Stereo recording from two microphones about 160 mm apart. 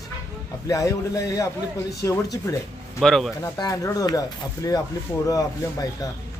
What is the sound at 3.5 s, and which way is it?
Speech, 20° left (ahead or behind).